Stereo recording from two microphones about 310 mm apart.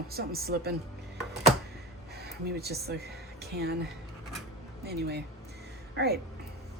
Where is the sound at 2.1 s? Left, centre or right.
Right.